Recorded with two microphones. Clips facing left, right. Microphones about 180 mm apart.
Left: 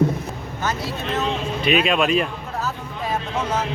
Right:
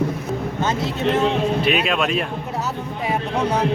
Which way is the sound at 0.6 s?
25° right (ahead or behind).